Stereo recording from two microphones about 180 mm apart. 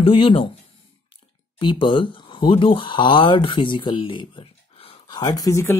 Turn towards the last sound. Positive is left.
turn(degrees=15)  # may be behind; listen again after turning